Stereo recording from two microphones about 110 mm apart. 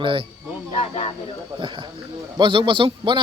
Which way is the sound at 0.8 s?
60° left (ahead or behind).